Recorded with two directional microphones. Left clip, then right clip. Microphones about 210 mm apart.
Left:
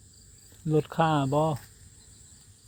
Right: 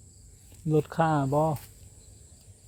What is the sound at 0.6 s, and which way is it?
Speech, 5° left (ahead or behind).